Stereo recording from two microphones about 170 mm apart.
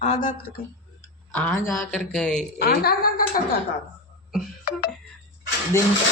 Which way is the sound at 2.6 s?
60° left (ahead or behind).